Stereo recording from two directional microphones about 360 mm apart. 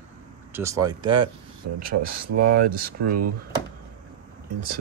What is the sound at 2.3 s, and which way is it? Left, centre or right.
Speech, right.